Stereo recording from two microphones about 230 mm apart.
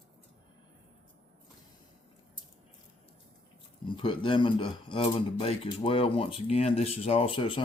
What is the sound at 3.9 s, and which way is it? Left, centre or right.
Speech, left.